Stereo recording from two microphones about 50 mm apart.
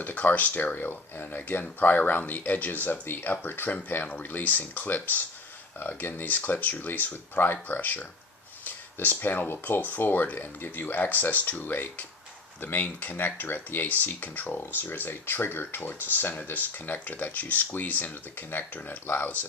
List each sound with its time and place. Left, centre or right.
0.0 s speech: left
8.6 s a sound: left
9.5 s speech: left